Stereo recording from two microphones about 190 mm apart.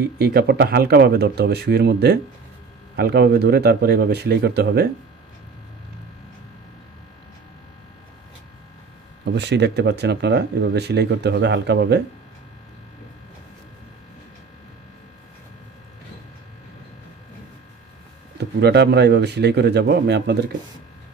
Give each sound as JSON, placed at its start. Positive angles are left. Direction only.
{"t": 0.2, "sound": "speech", "side_deg": -60}
{"t": 9.2, "sound": "speech", "side_deg": -65}
{"t": 18.4, "sound": "speech", "side_deg": -60}